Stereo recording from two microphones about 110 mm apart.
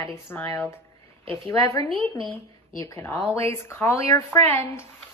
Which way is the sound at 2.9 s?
20° left (ahead or behind).